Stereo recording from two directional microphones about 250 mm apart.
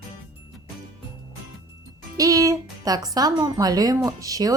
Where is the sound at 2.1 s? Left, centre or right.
Centre.